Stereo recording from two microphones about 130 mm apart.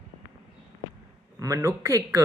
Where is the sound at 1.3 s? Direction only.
25° right (ahead or behind).